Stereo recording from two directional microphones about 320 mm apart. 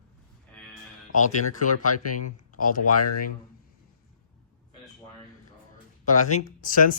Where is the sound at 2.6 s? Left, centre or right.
Left.